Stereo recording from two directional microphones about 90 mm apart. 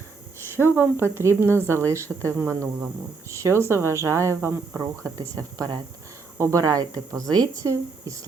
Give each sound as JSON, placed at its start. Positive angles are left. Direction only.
{"t": 0.5, "sound": "a woman's voice", "side_deg": -25}
{"t": 5.1, "sound": "a woman's voice", "side_deg": -40}